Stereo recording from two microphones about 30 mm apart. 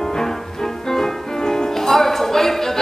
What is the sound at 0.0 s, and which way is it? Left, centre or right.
Music, centre.